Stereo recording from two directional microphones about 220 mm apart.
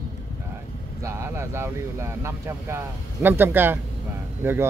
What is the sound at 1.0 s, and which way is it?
Speech, 10° right (ahead or behind).